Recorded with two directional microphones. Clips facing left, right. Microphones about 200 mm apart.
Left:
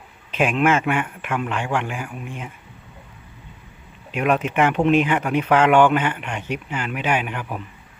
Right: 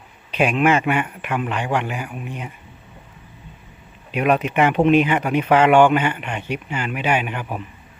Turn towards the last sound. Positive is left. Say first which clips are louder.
# right 1 dB
turn(degrees=-5)  # may be behind; listen again after turning